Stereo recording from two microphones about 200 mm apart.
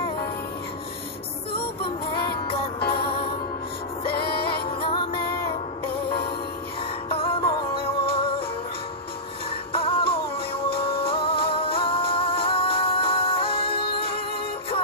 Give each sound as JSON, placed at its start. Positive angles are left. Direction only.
{"t": 1.6, "sound": "child singing", "side_deg": 25}
{"t": 4.1, "sound": "music", "side_deg": 50}
{"t": 4.8, "sound": "music", "side_deg": 25}
{"t": 7.1, "sound": "music", "side_deg": 25}
{"t": 9.7, "sound": "music", "side_deg": 25}